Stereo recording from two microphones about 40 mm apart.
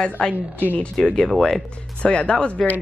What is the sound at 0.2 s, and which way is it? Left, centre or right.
Speech, left.